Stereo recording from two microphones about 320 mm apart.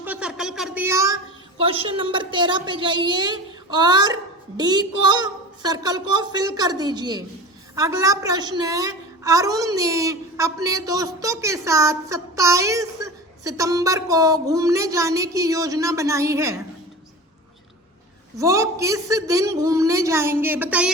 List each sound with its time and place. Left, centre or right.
0.0 s a woman's voice: centre
18.3 s a woman's voice: centre